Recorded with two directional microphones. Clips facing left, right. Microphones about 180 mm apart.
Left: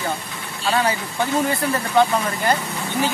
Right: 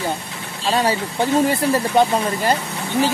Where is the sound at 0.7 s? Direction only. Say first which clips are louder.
Right 2 dB; 30° right (ahead or behind).